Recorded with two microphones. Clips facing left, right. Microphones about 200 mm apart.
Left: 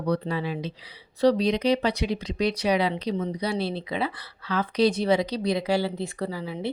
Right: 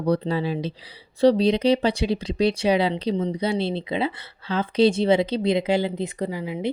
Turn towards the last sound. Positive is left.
turn(degrees=-15)  # may be behind; listen again after turning